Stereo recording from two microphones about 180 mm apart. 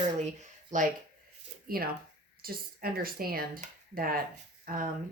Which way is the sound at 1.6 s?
55° right (ahead or behind).